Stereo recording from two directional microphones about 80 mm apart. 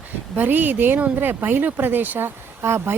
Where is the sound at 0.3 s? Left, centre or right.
Right.